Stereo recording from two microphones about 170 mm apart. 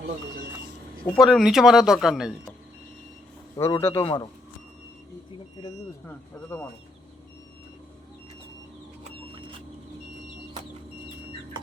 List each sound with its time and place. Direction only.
1.1 s speech: centre (ahead or behind)
3.6 s speech: 15° left (ahead or behind)
4.0 s speech: 30° left (ahead or behind)
6.1 s speech: 15° left (ahead or behind)